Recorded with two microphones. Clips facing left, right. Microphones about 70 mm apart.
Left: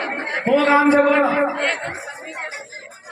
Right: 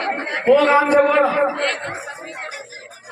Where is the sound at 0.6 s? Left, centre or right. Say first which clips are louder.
Even; centre.